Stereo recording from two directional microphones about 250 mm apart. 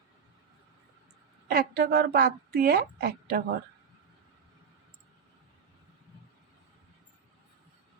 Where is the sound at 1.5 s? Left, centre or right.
Right.